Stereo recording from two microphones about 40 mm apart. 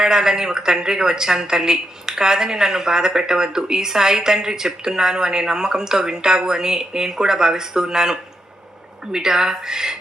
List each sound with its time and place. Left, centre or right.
0.0 s a woman's voice: centre